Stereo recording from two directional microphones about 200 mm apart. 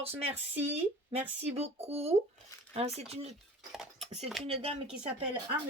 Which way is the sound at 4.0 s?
30° right (ahead or behind).